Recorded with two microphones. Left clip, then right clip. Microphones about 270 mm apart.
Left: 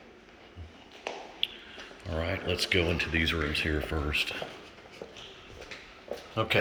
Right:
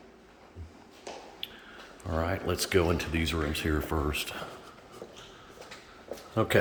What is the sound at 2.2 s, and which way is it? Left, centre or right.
Speech, centre.